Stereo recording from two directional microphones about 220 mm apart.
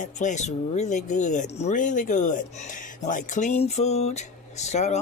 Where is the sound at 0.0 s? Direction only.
35° left (ahead or behind).